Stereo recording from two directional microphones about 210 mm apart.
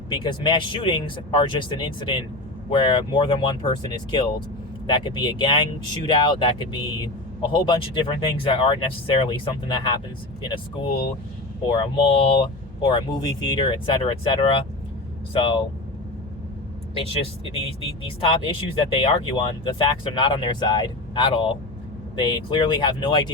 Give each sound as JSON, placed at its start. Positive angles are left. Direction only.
{"t": 0.1, "sound": "speech", "side_deg": 20}
{"t": 11.7, "sound": "speech", "side_deg": 25}
{"t": 16.9, "sound": "speech", "side_deg": 25}